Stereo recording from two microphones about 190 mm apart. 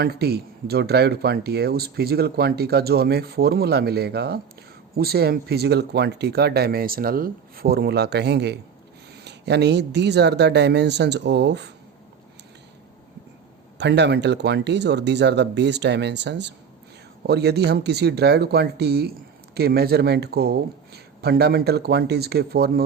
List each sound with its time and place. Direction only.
0.0 s speech: 55° right (ahead or behind)
13.7 s speech: 65° right (ahead or behind)